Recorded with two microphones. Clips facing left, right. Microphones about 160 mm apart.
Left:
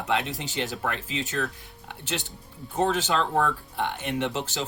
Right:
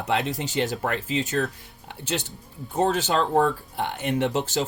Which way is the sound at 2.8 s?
40° right (ahead or behind).